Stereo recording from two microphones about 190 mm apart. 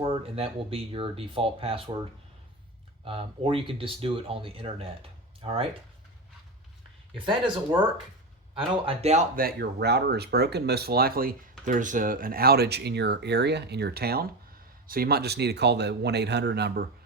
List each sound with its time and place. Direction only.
0.0 s speech: 30° right (ahead or behind)
3.0 s speech: 30° right (ahead or behind)
7.3 s speech: 25° right (ahead or behind)
9.3 s speech: 50° right (ahead or behind)